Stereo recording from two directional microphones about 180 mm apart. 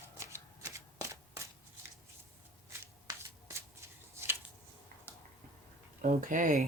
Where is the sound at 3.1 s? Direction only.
15° right (ahead or behind).